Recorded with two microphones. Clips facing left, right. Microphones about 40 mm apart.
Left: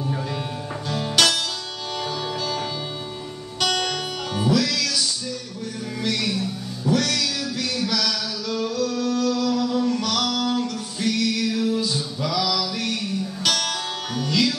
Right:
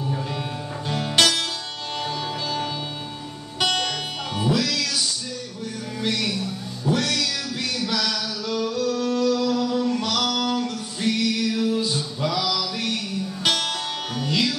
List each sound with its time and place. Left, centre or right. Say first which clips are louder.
0.8 s music: right 1 dB; right
2.0 s music: left 1 dB; centre
4.4 s music: left 2 dB; right
6.9 s music: left 1 dB; right
7.8 s a sound: even; right
8.7 s music: even; right